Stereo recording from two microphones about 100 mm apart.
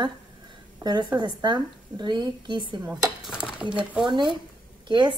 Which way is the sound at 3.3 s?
10° right (ahead or behind).